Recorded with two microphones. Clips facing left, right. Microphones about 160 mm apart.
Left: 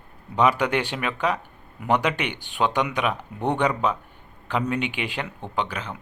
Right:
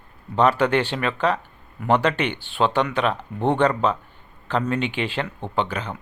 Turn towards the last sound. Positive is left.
turn(degrees=5)  # may be behind; listen again after turning